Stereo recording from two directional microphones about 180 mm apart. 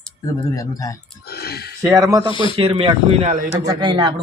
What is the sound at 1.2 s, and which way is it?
Speech, 60° left (ahead or behind).